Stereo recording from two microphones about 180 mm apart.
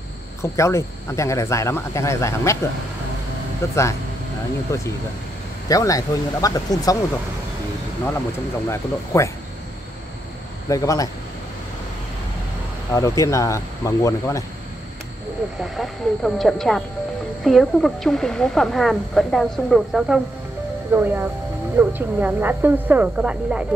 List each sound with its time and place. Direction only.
0.4 s speech: 15° left (ahead or behind)
3.6 s speech: 15° left (ahead or behind)
8.6 s speech: 15° left (ahead or behind)
10.7 s speech: 20° left (ahead or behind)
12.9 s speech: 15° left (ahead or behind)
15.6 s speech: centre (ahead or behind)